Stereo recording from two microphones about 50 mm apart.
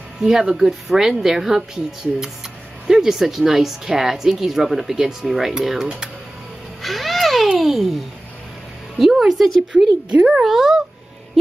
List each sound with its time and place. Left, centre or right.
0.2 s speech: centre
2.9 s speech: centre
6.8 s a sound: centre
8.9 s a woman's voice: centre
10.0 s a child's voice: right
10.4 s speech: centre